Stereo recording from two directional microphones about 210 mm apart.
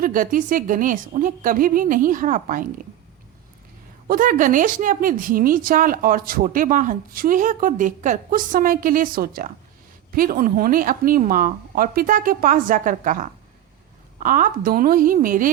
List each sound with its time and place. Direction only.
0.0 s speech: 40° right (ahead or behind)
4.1 s speech: 40° right (ahead or behind)